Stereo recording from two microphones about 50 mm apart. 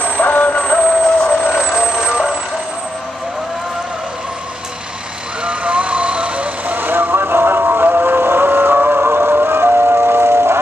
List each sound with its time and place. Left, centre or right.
0.0 s music: left
0.6 s music: centre
1.8 s vehicle: centre
5.4 s vehicle: right